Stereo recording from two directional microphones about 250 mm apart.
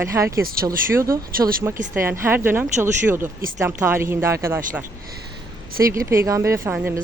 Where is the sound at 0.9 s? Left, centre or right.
Centre.